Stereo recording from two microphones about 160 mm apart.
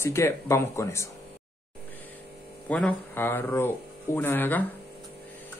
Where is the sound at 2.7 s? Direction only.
10° left (ahead or behind).